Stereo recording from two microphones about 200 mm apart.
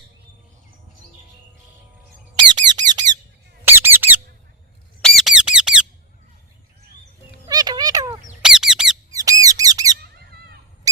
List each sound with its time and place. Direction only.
2.6 s squeak: 20° right (ahead or behind); by 5.8 s 5° right (ahead or behind)
7.4 s music: 20° right (ahead or behind)
8.4 s squeak: 5° right (ahead or behind)
9.1 s squeak: 15° right (ahead or behind)
10.2 s bird: 55° right (ahead or behind)